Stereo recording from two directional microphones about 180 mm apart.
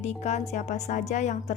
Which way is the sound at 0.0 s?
40° left (ahead or behind).